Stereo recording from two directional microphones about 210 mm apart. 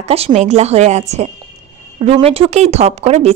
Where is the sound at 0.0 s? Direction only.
30° right (ahead or behind).